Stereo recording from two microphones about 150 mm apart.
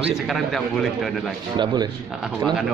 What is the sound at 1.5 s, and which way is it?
Speech, 30° right (ahead or behind).